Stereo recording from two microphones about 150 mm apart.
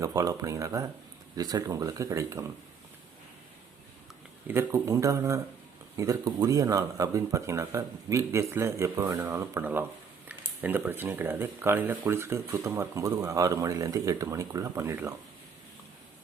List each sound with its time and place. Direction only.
0.0 s speech: 25° right (ahead or behind)
4.4 s speech: 15° right (ahead or behind)